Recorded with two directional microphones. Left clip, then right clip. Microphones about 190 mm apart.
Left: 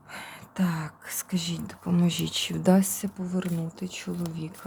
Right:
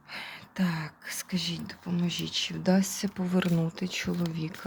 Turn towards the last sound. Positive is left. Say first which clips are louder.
# right 2 dB
turn(degrees=-5)  # may be behind; listen again after turning